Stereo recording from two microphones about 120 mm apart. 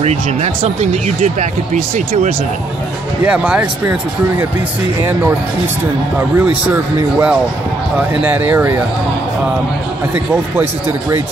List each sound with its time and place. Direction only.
0.0 s speech: 65° right (ahead or behind); by 1.8 s 85° right
3.3 s speech: 10° right (ahead or behind)
6.3 s speech: 15° right (ahead or behind)
10.1 s speech: 20° right (ahead or behind)